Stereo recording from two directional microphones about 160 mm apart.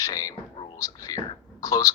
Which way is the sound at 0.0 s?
20° left (ahead or behind).